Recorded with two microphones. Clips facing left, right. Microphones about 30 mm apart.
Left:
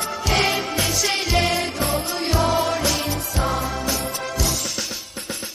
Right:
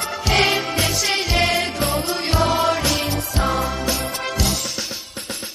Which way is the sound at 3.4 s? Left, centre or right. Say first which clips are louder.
Right 2 dB; centre.